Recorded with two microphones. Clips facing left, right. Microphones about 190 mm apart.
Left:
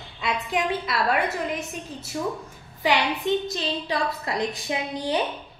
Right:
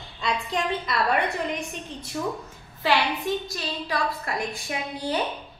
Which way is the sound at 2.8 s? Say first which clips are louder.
Left 1 dB; 20° left (ahead or behind).